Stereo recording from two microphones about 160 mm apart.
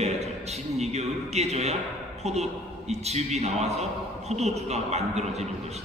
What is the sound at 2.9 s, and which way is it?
A man's voice, 40° right (ahead or behind).